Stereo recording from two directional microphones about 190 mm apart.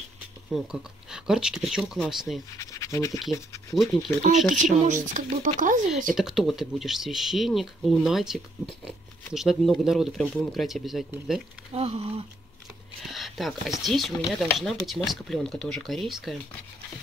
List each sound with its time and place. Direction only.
0.5 s speech: centre (ahead or behind)
2.5 s speech: 15° left (ahead or behind)
3.7 s speech: centre (ahead or behind)
4.8 s speech: 40° right (ahead or behind)
6.1 s speech: centre (ahead or behind)
11.7 s speech: 30° right (ahead or behind)
13.0 s speech: centre (ahead or behind)